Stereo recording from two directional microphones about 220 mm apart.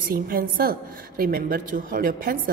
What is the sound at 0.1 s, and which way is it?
A woman's voice, 40° right (ahead or behind).